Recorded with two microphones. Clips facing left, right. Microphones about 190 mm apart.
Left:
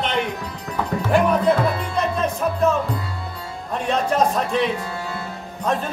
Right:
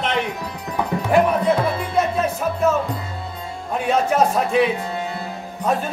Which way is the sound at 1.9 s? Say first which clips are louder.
Right 2 dB; 5° right (ahead or behind).